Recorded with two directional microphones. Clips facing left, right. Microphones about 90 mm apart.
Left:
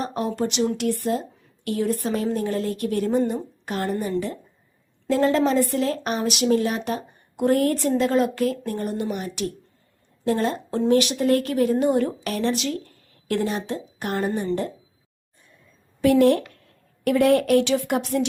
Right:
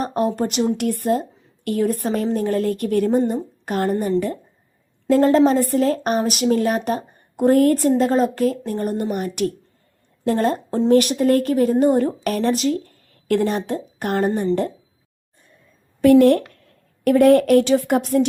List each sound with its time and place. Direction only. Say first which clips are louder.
0.0 s speech: right 4 dB; 45° right (ahead or behind)
5.0 s speech: right 5 dB; 45° right (ahead or behind)
16.0 s speech: right 5 dB; 50° right (ahead or behind)